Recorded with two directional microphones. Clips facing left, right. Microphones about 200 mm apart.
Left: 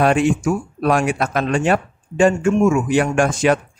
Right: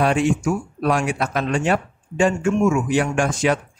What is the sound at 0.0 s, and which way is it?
Speech, 50° left (ahead or behind).